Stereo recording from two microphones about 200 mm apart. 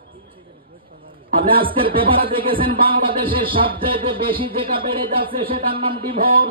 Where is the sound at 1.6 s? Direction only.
25° right (ahead or behind).